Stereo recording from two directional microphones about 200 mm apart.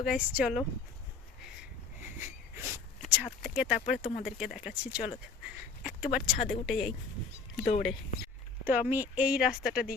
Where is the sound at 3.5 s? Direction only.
5° right (ahead or behind).